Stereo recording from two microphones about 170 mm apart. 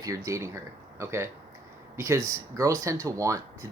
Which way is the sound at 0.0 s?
20° right (ahead or behind).